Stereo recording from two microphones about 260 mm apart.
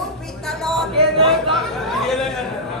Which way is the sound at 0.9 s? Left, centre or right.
Right.